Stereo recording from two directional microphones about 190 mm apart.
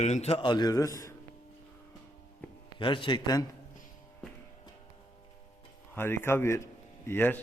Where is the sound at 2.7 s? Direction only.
25° left (ahead or behind).